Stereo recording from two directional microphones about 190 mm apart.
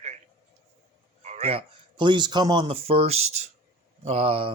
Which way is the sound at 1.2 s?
35° right (ahead or behind).